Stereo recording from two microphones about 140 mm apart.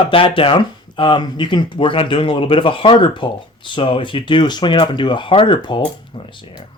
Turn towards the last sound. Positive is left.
turn(degrees=35)  # may be behind; listen again after turning